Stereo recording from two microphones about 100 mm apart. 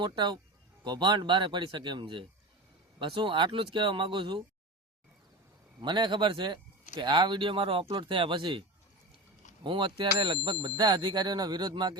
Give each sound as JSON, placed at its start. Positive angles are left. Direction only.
{"t": 0.0, "sound": "speech", "side_deg": -50}
{"t": 5.8, "sound": "speech", "side_deg": -50}
{"t": 9.6, "sound": "speech", "side_deg": -55}